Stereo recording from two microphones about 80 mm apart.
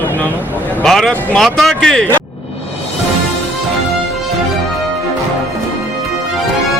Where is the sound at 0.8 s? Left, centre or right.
Centre.